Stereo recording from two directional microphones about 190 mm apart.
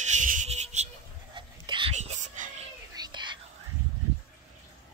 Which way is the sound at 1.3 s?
25° right (ahead or behind).